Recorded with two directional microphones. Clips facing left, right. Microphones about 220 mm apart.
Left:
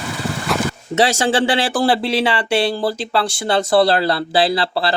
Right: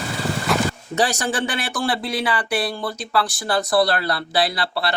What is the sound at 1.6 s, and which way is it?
Speech, 30° left (ahead or behind).